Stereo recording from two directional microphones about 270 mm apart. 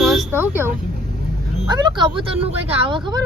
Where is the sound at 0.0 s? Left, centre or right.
Centre.